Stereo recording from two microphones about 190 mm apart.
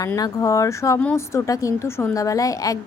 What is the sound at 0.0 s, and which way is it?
Speech, 15° left (ahead or behind).